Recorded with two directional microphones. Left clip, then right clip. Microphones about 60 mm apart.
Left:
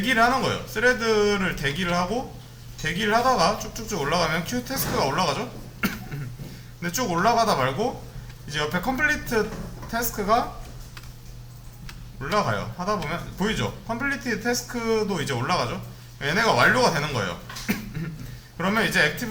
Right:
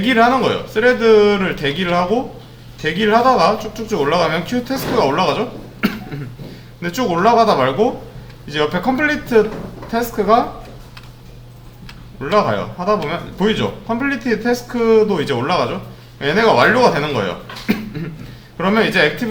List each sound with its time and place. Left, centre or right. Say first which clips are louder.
0.0 s speech: right 7 dB; left
12.2 s speech: right 9 dB; left
17.7 s a sound: right 9 dB; left
18.5 s speech: right 7 dB; left